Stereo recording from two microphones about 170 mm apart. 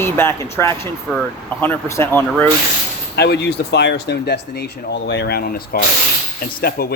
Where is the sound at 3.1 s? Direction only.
80° left; by 6.9 s 60° left (ahead or behind).